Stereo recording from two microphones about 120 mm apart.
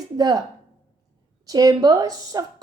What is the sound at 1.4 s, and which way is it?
A woman's voice, 30° right (ahead or behind).